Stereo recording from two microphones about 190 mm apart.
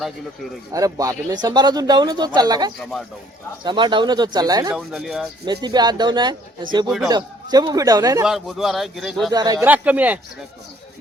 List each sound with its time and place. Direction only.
0.7 s speech: 15° right (ahead or behind)
4.7 s speech: centre (ahead or behind)
5.6 s speech: 20° right (ahead or behind)
8.2 s speech: centre (ahead or behind)
9.3 s speech: 20° right (ahead or behind)
9.6 s speech: 10° right (ahead or behind)